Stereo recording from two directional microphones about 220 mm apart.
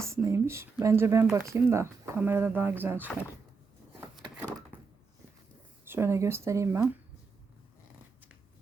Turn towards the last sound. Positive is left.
turn(degrees=-15)  # may be behind; listen again after turning